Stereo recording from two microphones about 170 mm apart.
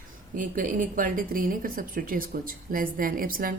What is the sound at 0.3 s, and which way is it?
Speech, 50° right (ahead or behind).